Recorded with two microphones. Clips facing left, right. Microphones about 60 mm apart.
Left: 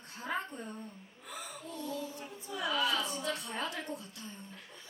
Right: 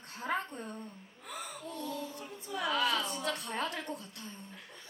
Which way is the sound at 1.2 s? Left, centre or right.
Right.